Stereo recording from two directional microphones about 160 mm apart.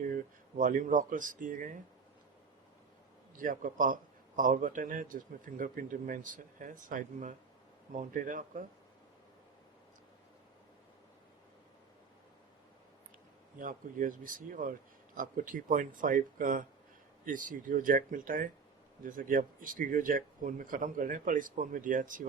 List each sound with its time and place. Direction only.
0.0 s speech: 60° right (ahead or behind)
3.3 s a man's voice: 60° right (ahead or behind)
13.6 s a man's voice: 55° right (ahead or behind)